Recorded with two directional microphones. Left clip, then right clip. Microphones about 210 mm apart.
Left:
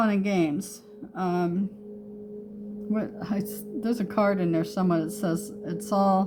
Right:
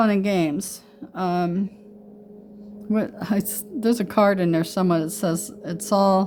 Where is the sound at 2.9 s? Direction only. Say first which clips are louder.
Right 6 dB; 45° right (ahead or behind).